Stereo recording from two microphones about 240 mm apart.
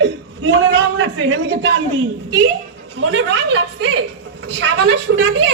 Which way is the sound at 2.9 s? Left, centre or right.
Right.